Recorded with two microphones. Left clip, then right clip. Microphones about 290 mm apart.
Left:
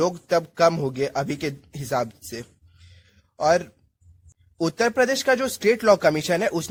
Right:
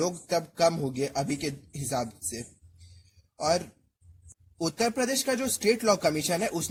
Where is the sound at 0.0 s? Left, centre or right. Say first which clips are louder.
Left 7 dB; left.